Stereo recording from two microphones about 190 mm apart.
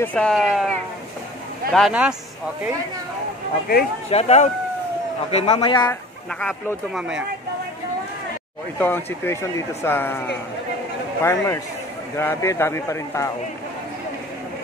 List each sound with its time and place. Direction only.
0.0 s speech: 5° left (ahead or behind)
1.7 s speech: centre (ahead or behind)
4.1 s a man's voice: 35° left (ahead or behind)
6.4 s speech: 5° right (ahead or behind)
8.7 s speech: 10° left (ahead or behind)